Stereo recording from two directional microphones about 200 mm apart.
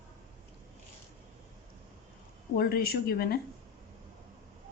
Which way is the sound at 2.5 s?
50° left (ahead or behind).